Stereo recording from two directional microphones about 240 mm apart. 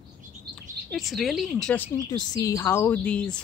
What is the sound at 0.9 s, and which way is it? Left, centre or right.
A woman's voice, centre.